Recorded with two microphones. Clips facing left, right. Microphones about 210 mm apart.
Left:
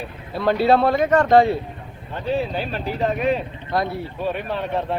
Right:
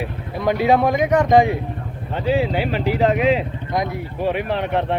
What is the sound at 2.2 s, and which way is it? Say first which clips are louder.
Speech: right 4 dB; 80° right.